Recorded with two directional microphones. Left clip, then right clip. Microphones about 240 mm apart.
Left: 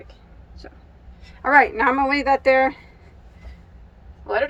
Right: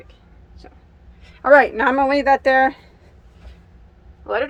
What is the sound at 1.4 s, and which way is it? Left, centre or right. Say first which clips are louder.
Speech: right 3 dB; right.